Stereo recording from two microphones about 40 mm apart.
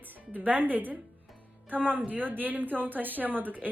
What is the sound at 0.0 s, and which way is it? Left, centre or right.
A woman's voice, right.